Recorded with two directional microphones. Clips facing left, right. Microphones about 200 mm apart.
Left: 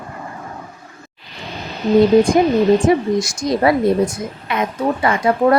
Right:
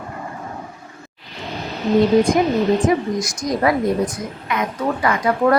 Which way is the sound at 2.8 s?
25° left (ahead or behind).